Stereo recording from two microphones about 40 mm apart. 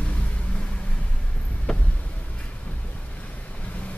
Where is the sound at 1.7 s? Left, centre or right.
Left.